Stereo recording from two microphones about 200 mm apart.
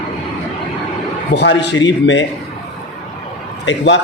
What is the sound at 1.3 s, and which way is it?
Speech, 60° left (ahead or behind).